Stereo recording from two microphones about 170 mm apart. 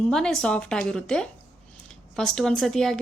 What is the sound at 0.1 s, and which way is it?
A woman's voice, centre (ahead or behind).